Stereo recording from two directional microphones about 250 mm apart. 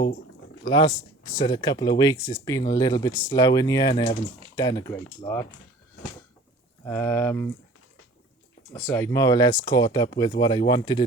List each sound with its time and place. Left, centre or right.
0.6 s speech: centre
6.8 s speech: centre
8.7 s speech: centre